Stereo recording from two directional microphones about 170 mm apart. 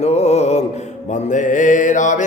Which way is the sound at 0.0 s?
40° left (ahead or behind).